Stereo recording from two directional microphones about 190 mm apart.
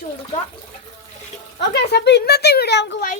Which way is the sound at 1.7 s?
60° left (ahead or behind).